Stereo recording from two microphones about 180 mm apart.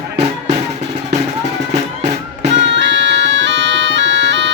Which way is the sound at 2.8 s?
85° right.